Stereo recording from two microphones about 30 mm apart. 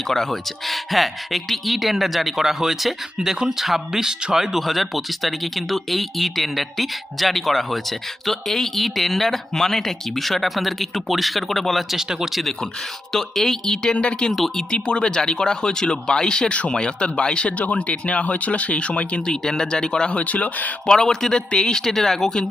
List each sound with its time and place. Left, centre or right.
0.1 s speech: centre
0.7 s speech: centre
4.5 s speech: centre
11.9 s speech: centre
12.3 s speech: centre
14.7 s speech: left
16.5 s speech: left
17.6 s speech: left
18.2 s speech: left
19.7 s speech: left
20.1 s speech: left
20.8 s speech: centre